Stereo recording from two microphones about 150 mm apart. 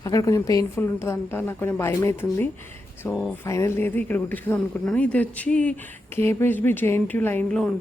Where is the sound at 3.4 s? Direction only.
20° left (ahead or behind).